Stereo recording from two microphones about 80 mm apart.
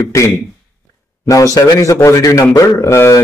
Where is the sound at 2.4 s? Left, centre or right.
Left.